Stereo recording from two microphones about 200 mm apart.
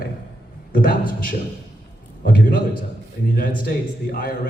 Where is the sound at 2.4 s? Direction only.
45° left (ahead or behind).